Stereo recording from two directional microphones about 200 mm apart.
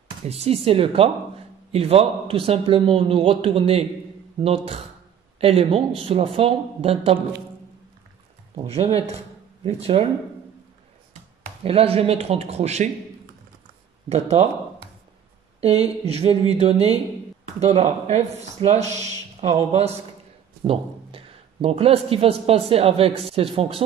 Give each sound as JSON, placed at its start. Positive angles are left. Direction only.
{"t": 0.3, "sound": "a man's voice", "side_deg": -30}
{"t": 8.6, "sound": "a man's voice", "side_deg": -30}
{"t": 11.6, "sound": "speech", "side_deg": -30}
{"t": 14.0, "sound": "speech", "side_deg": -35}
{"t": 15.6, "sound": "speech", "side_deg": -30}